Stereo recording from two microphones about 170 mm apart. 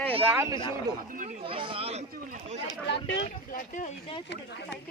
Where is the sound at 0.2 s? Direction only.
15° right (ahead or behind).